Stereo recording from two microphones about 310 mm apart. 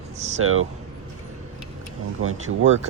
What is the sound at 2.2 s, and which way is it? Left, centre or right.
Speech, right.